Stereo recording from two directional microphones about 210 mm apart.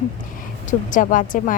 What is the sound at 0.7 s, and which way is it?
Speech, 40° left (ahead or behind).